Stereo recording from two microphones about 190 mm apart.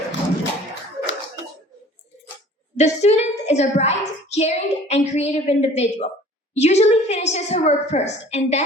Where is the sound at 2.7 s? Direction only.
35° left (ahead or behind).